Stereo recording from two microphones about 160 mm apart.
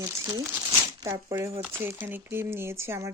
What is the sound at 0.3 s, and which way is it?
Speech, 20° right (ahead or behind).